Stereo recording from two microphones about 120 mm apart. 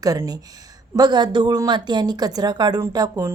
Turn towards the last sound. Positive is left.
turn(degrees=-35)  # may be behind; listen again after turning